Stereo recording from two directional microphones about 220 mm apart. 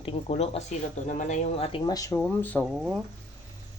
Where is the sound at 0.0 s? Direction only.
25° left (ahead or behind); by 2.6 s 5° left (ahead or behind).